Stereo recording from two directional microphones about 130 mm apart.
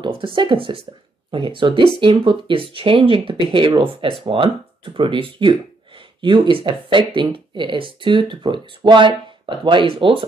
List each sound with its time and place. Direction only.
0.0 s speech: 40° right (ahead or behind)